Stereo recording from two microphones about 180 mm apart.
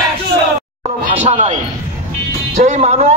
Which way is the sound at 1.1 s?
40° right (ahead or behind).